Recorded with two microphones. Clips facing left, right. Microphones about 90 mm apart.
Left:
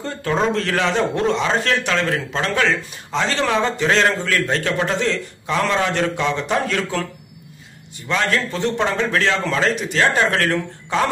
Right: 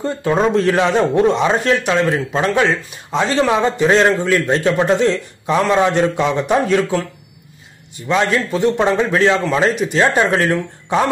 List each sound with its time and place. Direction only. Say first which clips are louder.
0.0 s a man's voice: right 4 dB; 15° right (ahead or behind)
8.1 s a man's voice: right 4 dB; 20° right (ahead or behind)